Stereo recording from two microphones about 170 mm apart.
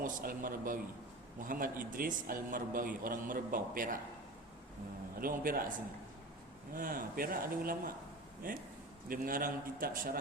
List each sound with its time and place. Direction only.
0.0 s a man's voice: 55° right (ahead or behind)
5.2 s a man's voice: 55° right (ahead or behind)
6.7 s a man's voice: 55° right (ahead or behind)